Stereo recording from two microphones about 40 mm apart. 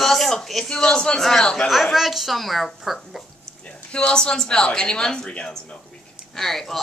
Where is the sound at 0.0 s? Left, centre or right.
Centre; by 1.7 s left.